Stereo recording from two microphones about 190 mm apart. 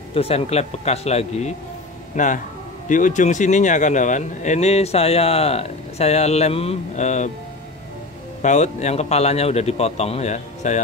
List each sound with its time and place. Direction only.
0.1 s speech: 30° left (ahead or behind)
8.4 s speech: 40° left (ahead or behind)